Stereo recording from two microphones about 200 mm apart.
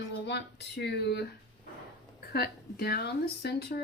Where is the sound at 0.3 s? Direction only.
60° left (ahead or behind).